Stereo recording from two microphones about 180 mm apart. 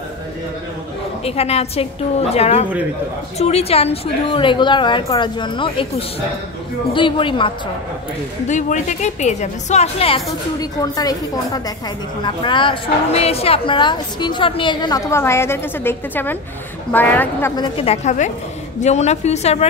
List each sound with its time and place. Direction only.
1.2 s a woman's voice: 35° left (ahead or behind)
8.5 s a woman's voice: 40° left (ahead or behind); by 17.5 s 10° left (ahead or behind)
17.6 s a woman's voice: 30° left (ahead or behind)